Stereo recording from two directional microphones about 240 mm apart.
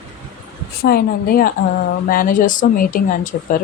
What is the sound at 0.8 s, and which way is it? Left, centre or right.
Speech, left.